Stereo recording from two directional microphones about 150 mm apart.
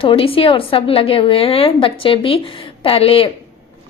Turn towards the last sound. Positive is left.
turn(degrees=40)  # may be behind; listen again after turning